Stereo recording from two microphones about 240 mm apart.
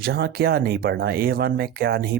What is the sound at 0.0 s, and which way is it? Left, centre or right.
Speech, right.